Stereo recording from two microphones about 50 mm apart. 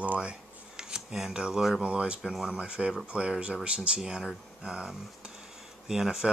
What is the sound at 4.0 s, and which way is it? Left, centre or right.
Speech, centre.